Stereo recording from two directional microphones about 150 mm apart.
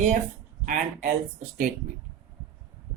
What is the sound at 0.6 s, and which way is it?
Speech, 60° right (ahead or behind).